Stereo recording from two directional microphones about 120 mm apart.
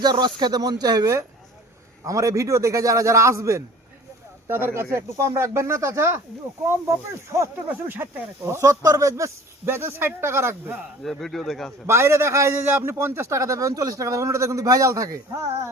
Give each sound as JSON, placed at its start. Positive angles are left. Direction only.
{"t": 0.0, "sound": "a man's voice", "side_deg": -35}
{"t": 7.3, "sound": "a man's voice", "side_deg": -20}
{"t": 8.6, "sound": "a man's voice", "side_deg": -30}
{"t": 11.0, "sound": "speech", "side_deg": 0}
{"t": 11.9, "sound": "a man's voice", "side_deg": -20}